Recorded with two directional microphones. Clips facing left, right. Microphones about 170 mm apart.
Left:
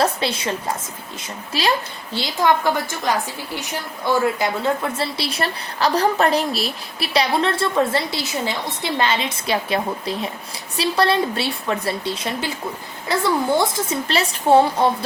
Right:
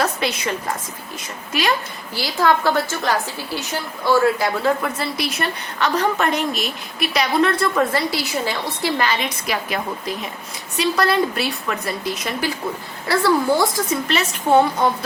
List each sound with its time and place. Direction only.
0.0 s a sound: 30° left (ahead or behind)
2.1 s a woman's voice: 20° left (ahead or behind)
14.1 s a woman's voice: 30° left (ahead or behind)